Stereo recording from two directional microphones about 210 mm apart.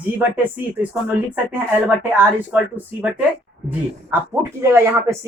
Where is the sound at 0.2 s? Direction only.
10° right (ahead or behind).